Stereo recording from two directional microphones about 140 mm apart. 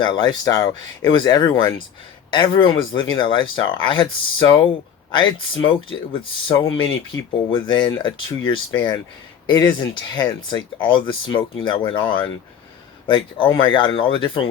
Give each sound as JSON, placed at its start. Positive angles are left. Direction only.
{"t": 0.0, "sound": "speech", "side_deg": 35}